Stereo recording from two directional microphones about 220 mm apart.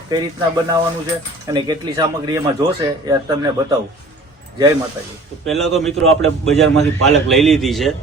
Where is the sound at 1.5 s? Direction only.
20° right (ahead or behind).